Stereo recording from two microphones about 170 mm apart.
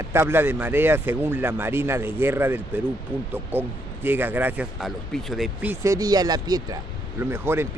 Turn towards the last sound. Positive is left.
turn(degrees=-15)  # may be behind; listen again after turning